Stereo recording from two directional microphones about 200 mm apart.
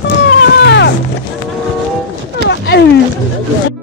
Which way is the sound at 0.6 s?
60° left (ahead or behind).